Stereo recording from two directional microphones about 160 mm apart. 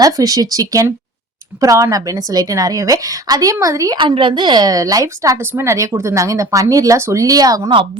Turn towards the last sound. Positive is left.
turn(degrees=-25)  # may be behind; listen again after turning